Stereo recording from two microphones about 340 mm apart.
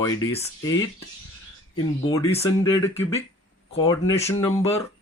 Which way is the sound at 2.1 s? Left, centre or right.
Centre.